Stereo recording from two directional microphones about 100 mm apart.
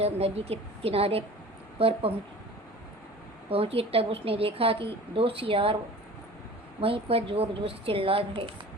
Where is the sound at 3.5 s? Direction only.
75° right (ahead or behind).